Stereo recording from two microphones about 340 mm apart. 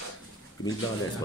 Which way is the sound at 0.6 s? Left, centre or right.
Left.